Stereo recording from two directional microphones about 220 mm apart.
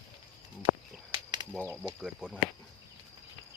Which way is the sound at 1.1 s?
20° right (ahead or behind).